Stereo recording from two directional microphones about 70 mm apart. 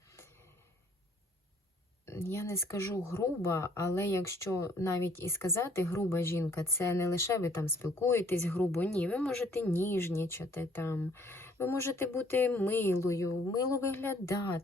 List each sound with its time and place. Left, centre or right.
2.0 s a woman's voice: left
9.2 s a woman's voice: centre
9.6 s a woman's voice: left
13.0 s speech: left